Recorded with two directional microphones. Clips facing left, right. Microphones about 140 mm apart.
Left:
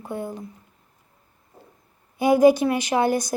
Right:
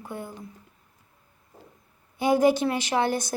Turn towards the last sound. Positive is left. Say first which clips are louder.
# left 4 dB
turn(degrees=15)  # may be behind; listen again after turning